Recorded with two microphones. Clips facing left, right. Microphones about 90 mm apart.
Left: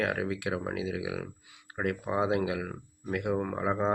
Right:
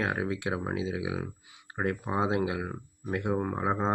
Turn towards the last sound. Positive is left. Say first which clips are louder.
# even
turn(degrees=-25)  # may be behind; listen again after turning